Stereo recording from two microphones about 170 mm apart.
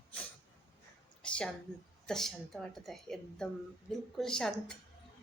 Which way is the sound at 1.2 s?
5° left (ahead or behind).